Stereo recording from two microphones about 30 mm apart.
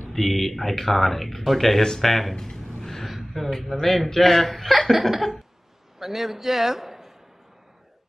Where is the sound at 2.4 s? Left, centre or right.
Centre.